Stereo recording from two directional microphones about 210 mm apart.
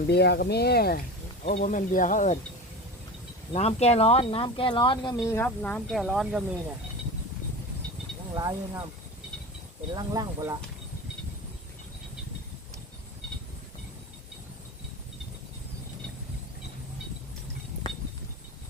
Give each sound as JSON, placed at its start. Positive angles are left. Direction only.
{"t": 0.1, "sound": "speech", "side_deg": 50}
{"t": 3.5, "sound": "speech", "side_deg": 30}
{"t": 8.4, "sound": "speech", "side_deg": -20}
{"t": 9.9, "sound": "speech", "side_deg": -20}